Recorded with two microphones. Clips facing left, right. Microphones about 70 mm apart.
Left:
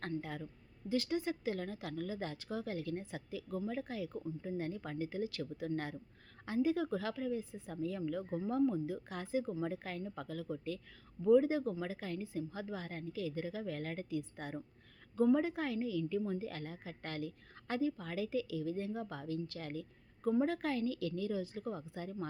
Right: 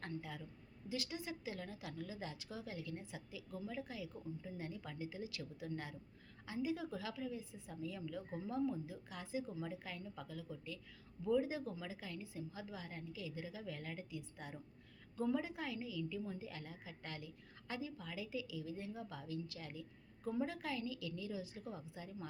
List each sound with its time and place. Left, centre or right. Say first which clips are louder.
0.2 s a woman's voice: left 6 dB; left